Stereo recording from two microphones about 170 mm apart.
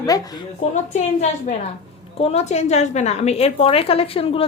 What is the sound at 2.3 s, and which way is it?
A woman's voice, 40° left (ahead or behind).